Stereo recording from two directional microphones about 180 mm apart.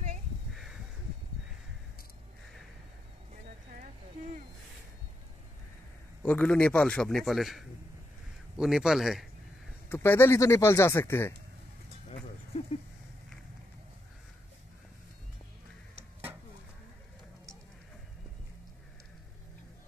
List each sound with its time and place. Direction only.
6.2 s a man's voice: 10° left (ahead or behind)
9.8 s speech: 10° left (ahead or behind)
12.5 s a sound: 40° left (ahead or behind)